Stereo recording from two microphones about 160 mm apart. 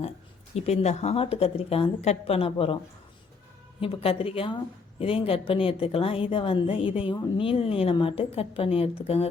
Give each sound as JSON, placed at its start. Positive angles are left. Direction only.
{"t": 0.5, "sound": "a woman's voice", "side_deg": 40}
{"t": 3.8, "sound": "a woman's voice", "side_deg": 35}